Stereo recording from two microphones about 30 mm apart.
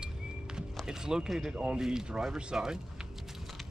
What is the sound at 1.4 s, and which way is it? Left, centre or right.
Speech, right.